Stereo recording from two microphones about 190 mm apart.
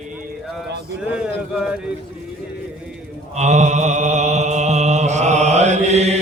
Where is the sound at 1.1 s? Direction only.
5° right (ahead or behind).